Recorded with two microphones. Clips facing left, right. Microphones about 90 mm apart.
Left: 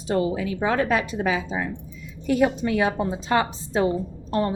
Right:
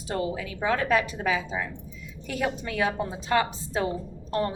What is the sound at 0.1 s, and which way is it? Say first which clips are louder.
A woman's voice: left 6 dB; 25° left (ahead or behind).